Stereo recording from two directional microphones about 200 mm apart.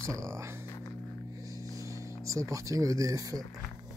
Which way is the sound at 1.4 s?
15° right (ahead or behind).